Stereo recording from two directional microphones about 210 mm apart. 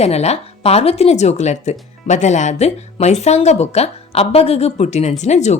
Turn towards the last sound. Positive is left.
turn(degrees=35)  # may be behind; listen again after turning